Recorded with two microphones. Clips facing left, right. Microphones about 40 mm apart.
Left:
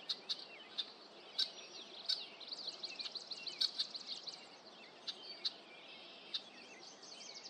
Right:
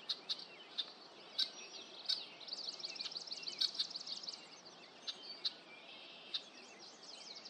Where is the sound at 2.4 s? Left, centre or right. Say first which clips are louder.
Right 1 dB; left.